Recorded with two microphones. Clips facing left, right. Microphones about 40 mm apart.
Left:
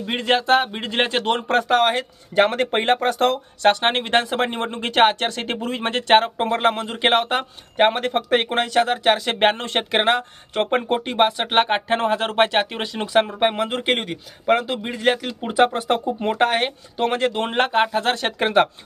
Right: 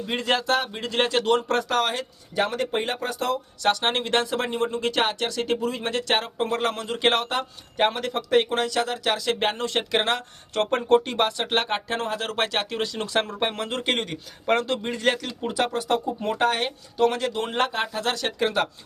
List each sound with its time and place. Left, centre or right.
0.0 s speech: left